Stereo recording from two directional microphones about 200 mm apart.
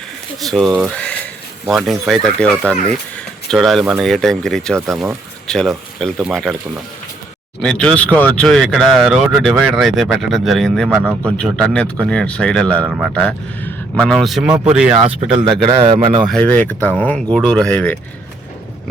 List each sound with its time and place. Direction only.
0.4 s speech: centre (ahead or behind)
7.6 s a man's voice: 5° left (ahead or behind)
15.6 s speech: 30° right (ahead or behind)
16.2 s a man's voice: 5° left (ahead or behind)